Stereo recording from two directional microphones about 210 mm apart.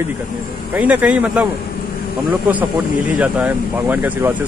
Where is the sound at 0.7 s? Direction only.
5° right (ahead or behind).